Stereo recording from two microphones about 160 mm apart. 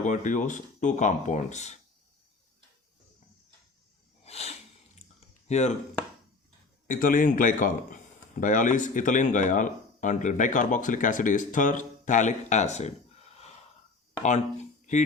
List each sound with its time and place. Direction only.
0.0 s speech: 50° left (ahead or behind)
4.2 s snort: 40° left (ahead or behind)
5.5 s speech: 45° left (ahead or behind)
6.8 s a man's voice: 55° left (ahead or behind)
14.3 s a sound: 45° left (ahead or behind)